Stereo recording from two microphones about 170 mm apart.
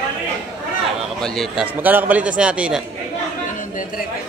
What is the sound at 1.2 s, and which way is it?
A man's voice, centre (ahead or behind).